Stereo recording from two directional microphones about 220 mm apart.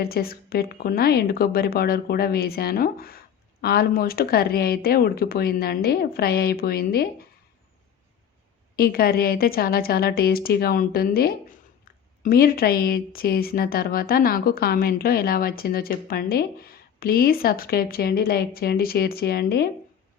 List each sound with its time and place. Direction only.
0.0 s speech: 45° left (ahead or behind)
8.7 s speech: 45° left (ahead or behind)